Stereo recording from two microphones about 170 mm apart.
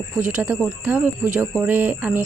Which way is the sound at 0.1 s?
5° right (ahead or behind).